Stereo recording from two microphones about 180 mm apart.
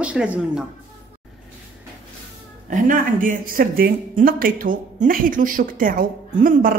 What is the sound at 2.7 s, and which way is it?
A woman's voice, 45° right (ahead or behind).